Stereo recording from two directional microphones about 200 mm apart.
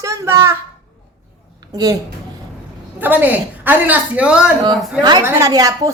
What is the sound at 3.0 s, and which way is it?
A man's voice, 10° right (ahead or behind).